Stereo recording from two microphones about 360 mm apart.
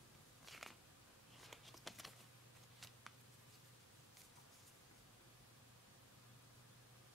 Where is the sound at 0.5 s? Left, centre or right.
Centre.